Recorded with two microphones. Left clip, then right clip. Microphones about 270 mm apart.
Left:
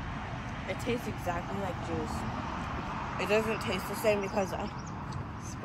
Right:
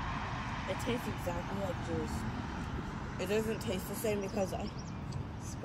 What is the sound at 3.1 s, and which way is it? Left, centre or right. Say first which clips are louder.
Speech: left 5 dB; left.